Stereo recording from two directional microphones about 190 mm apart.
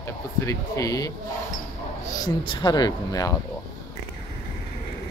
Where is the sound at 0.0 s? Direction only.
15° left (ahead or behind).